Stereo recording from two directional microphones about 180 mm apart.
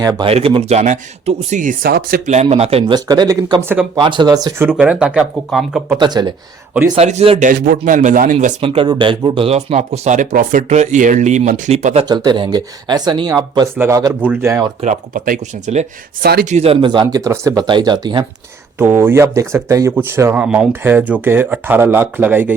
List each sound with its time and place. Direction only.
0.0 s speech: 20° right (ahead or behind)
0.3 s speech: 30° right (ahead or behind); by 2.3 s 55° right (ahead or behind)
2.3 s speech: 35° right (ahead or behind); by 5.8 s centre (ahead or behind)
6.0 s speech: 25° right (ahead or behind)
6.9 s speech: 35° right (ahead or behind)
8.6 s speech: 30° right (ahead or behind)
12.0 s speech: 25° right (ahead or behind)
14.8 s speech: 45° right (ahead or behind)
16.2 s speech: 65° right (ahead or behind)
16.5 s speech: 40° right (ahead or behind)
16.8 s speech: 25° right (ahead or behind)
18.8 s speech: 10° right (ahead or behind)